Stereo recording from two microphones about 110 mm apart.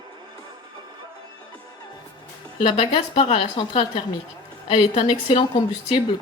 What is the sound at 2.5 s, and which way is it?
Speech, 60° left (ahead or behind).